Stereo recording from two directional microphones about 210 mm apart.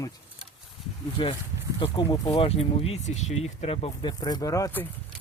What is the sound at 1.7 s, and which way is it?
Speech, 20° left (ahead or behind).